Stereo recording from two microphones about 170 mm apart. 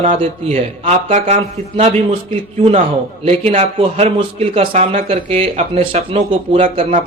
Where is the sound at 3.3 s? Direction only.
35° right (ahead or behind).